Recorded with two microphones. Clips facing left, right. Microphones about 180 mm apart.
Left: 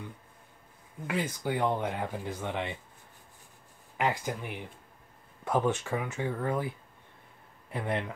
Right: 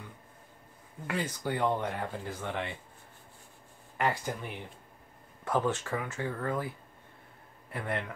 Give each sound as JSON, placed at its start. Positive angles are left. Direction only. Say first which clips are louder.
{"t": 1.0, "sound": "speech", "louder": "left 2 dB", "side_deg": 10}
{"t": 4.0, "sound": "speech", "louder": "left 1 dB", "side_deg": 15}
{"t": 7.7, "sound": "speech", "louder": "left 3 dB", "side_deg": 20}